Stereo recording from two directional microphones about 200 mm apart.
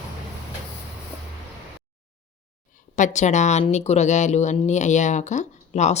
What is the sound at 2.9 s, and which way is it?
Speech, 40° left (ahead or behind).